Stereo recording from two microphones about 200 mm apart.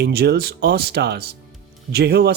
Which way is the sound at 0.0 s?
55° right (ahead or behind).